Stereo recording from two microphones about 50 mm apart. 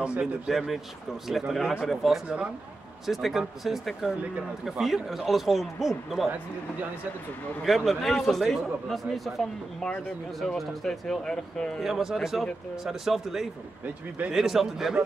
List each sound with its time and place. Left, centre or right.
0.0 s a man's voice: right
0.5 s a man's voice: centre
7.6 s a man's voice: centre
10.9 s speech: centre
11.8 s a man's voice: centre